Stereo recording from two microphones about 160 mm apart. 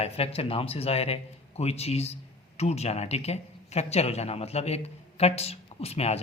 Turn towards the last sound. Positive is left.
turn(degrees=40)  # may be behind; listen again after turning